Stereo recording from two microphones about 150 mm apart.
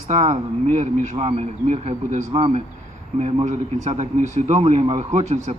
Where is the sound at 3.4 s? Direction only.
50° right (ahead or behind).